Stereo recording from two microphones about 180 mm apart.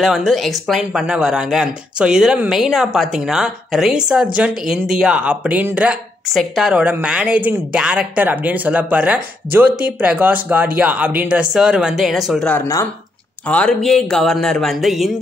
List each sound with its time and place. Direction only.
0.0 s speech: centre (ahead or behind)
12.5 s speech: 15° left (ahead or behind)
13.5 s speech: 5° left (ahead or behind)